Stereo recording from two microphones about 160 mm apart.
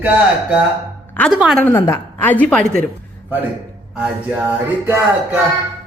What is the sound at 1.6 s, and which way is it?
A woman's voice, 15° left (ahead or behind).